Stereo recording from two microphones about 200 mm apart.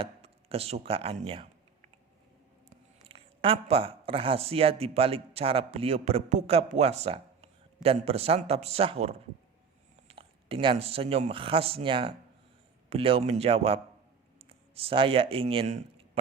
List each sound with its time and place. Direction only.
0.0 s speech: 30° right (ahead or behind)
3.1 s speech: 30° right (ahead or behind)